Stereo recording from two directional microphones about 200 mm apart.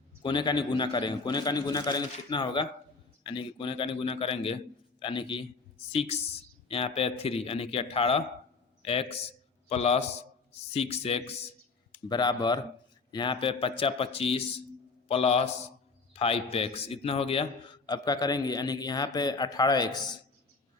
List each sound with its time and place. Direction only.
0.2 s a man's voice: 25° left (ahead or behind)